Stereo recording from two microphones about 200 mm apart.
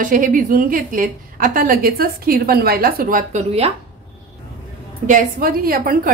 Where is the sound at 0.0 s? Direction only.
40° right (ahead or behind).